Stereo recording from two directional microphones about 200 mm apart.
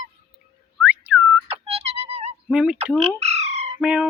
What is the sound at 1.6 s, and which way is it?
Music, 30° right (ahead or behind).